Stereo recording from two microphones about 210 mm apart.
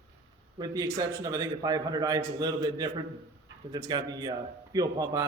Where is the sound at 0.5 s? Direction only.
20° right (ahead or behind).